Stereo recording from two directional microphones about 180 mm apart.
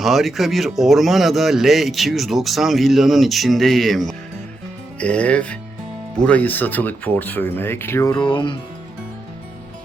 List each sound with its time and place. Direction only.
0.0 s a man's voice: centre (ahead or behind); by 8.5 s 25° left (ahead or behind)